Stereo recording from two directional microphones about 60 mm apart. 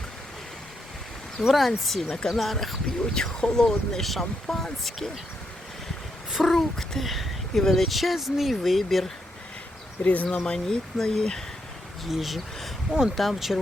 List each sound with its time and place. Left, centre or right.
1.4 s speech: centre
6.3 s speech: centre
10.0 s speech: left
10.3 s speech: centre
12.0 s speech: centre